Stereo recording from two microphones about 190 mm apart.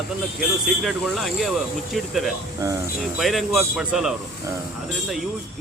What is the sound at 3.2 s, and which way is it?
Speech, centre (ahead or behind).